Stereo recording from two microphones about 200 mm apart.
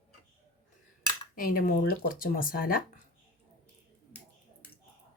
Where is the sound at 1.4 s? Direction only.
45° left (ahead or behind).